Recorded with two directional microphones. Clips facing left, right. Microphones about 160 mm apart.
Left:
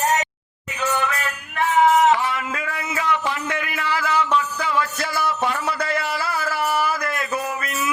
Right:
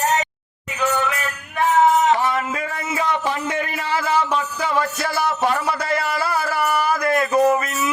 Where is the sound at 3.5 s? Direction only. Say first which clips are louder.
Right 2 dB; 30° right (ahead or behind).